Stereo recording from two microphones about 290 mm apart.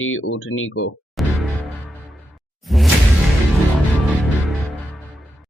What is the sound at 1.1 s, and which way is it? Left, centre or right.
Music, centre.